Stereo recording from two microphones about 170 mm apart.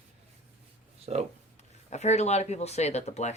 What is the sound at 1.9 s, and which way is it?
Speech, 40° left (ahead or behind).